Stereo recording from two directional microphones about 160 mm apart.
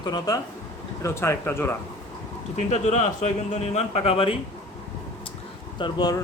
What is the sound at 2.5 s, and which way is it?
Speech, 50° left (ahead or behind).